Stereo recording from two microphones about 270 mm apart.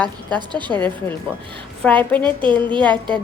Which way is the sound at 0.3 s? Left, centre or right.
Centre.